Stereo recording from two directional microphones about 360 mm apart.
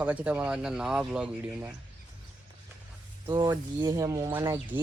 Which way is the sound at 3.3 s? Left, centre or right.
Centre.